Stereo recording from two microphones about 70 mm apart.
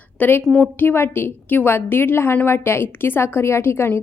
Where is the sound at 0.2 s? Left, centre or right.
Left.